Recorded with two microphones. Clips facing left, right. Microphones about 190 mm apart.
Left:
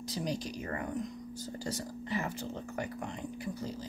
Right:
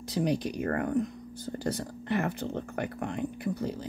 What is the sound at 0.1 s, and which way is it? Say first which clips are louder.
Speech: right 8 dB; 60° right (ahead or behind).